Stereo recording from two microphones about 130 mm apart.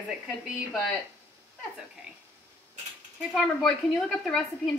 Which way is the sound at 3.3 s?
Centre (ahead or behind).